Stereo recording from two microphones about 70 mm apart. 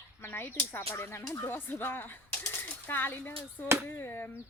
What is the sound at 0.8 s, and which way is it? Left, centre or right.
Speech, left.